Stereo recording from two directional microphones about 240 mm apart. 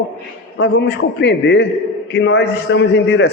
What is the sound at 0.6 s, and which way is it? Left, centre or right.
A man's voice, left.